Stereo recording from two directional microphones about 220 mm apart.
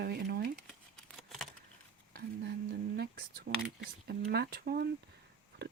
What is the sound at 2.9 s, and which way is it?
Speech, 45° right (ahead or behind).